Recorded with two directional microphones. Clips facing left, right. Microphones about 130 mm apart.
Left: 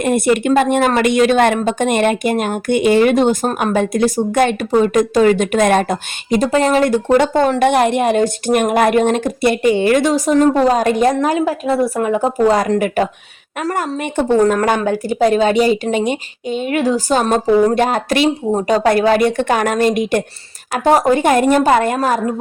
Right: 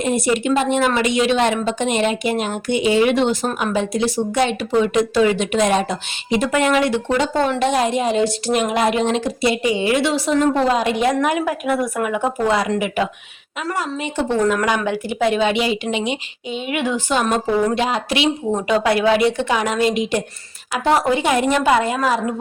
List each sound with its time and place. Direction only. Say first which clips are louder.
0.0 s speech: left 4 dB; 55° left (ahead or behind)
6.5 s speech: left 3 dB; 35° left (ahead or behind)
7.7 s speech: left 4 dB; 60° left (ahead or behind)